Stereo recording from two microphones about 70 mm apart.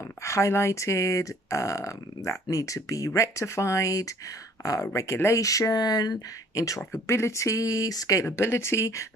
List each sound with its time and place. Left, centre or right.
0.2 s speech: left
4.9 s speech: left